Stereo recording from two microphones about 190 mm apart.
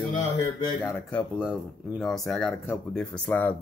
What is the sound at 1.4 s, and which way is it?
Speech, 5° right (ahead or behind).